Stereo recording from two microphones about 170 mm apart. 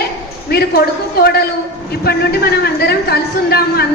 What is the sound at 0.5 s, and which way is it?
A woman's voice, 65° left (ahead or behind).